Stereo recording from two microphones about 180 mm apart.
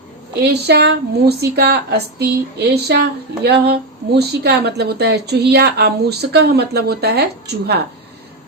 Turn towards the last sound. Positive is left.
turn(degrees=-65)  # may be behind; listen again after turning